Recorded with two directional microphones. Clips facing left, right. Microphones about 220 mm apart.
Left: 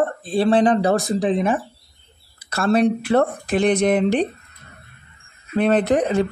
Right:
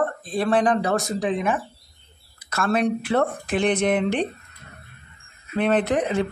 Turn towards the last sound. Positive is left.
turn(degrees=40)  # may be behind; listen again after turning